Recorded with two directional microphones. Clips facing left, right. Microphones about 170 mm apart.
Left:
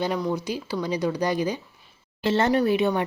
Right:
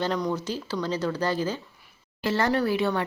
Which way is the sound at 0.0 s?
5° left (ahead or behind).